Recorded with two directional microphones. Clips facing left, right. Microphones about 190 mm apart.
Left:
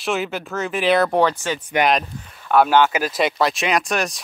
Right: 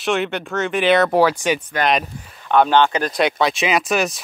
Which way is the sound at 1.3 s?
15° right (ahead or behind).